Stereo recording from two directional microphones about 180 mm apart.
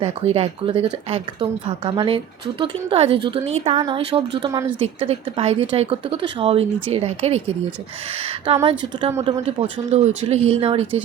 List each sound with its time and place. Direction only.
0.0 s a woman's voice: 35° right (ahead or behind)
8.5 s speech: 30° right (ahead or behind)